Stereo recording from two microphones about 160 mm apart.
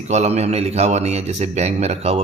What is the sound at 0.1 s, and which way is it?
A man's voice, 45° right (ahead or behind).